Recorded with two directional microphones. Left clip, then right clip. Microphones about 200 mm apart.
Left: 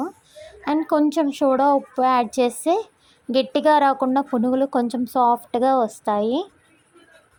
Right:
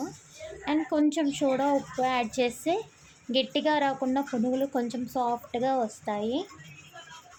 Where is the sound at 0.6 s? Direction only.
30° left (ahead or behind).